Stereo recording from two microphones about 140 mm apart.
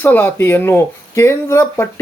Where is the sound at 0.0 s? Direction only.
15° left (ahead or behind).